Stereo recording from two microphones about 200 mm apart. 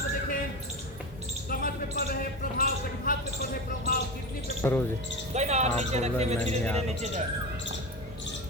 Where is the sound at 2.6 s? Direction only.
45° left (ahead or behind).